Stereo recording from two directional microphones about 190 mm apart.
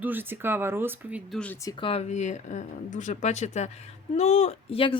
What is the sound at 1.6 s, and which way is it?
Speech, 25° left (ahead or behind).